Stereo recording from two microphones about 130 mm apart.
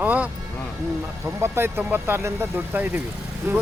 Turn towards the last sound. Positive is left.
turn(degrees=-20)  # may be behind; listen again after turning